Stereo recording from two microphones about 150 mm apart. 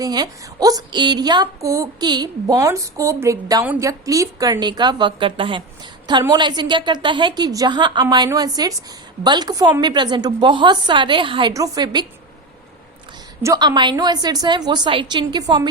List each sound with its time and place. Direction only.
0.0 s a woman's voice: 25° right (ahead or behind)
11.5 s a woman's voice: 25° right (ahead or behind)
13.4 s a woman's voice: 25° right (ahead or behind)